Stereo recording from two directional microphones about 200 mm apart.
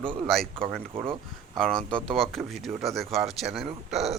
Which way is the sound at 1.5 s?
5° left (ahead or behind).